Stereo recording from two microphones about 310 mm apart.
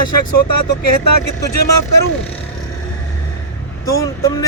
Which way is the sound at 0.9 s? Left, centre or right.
Left.